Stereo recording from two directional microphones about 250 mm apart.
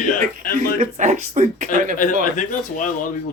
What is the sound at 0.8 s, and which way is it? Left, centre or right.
Speech, right.